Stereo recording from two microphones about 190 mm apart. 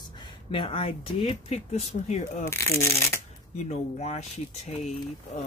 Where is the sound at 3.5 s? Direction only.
35° left (ahead or behind).